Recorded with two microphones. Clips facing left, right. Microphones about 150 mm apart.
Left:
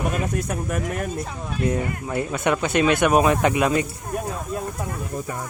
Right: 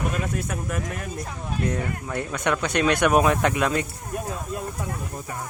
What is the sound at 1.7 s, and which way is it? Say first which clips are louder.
Speech: left 5 dB; 10° left (ahead or behind).